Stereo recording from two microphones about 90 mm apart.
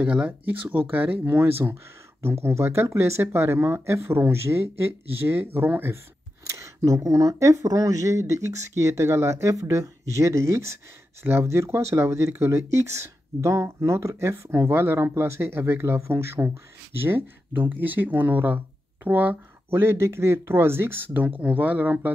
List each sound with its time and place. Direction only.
0.0 s speech: 15° right (ahead or behind)
6.4 s speech: 35° right (ahead or behind); by 22.1 s 20° right (ahead or behind)